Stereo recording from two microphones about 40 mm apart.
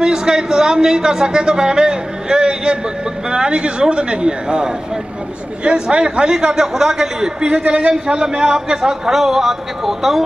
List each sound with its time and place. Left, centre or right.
0.0 s a man's voice: centre
7.4 s a man's voice: right
7.9 s a man's voice: centre